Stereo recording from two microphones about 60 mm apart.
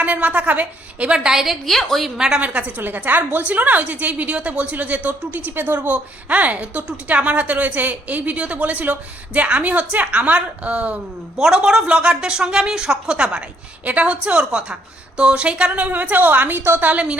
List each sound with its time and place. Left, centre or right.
0.0 s a woman's voice: right
1.6 s a woman's voice: centre
2.1 s speech: centre
2.4 s a woman's voice: right
11.3 s a woman's voice: centre; by 16.9 s right
16.9 s a woman's voice: centre